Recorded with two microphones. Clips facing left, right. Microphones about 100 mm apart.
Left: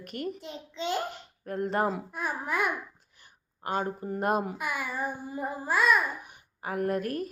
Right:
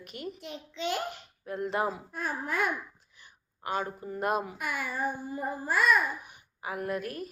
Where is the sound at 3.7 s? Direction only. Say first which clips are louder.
Left 2 dB; 35° left (ahead or behind).